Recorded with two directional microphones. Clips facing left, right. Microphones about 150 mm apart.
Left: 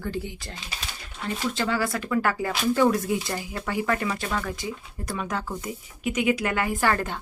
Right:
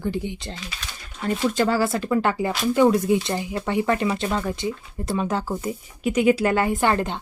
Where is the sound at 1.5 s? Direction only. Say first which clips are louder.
Right 5 dB; 40° right (ahead or behind).